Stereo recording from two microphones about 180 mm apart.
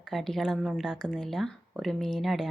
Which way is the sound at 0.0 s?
Centre (ahead or behind).